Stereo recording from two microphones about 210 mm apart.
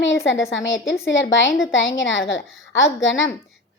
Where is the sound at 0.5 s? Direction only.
60° left (ahead or behind).